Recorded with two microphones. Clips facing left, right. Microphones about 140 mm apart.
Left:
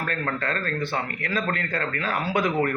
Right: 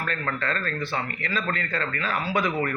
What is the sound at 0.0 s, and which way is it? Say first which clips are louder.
Speech: left 1 dB; 50° left (ahead or behind).